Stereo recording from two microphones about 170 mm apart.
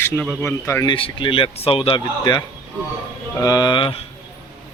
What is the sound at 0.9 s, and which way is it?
A man's voice, 30° left (ahead or behind).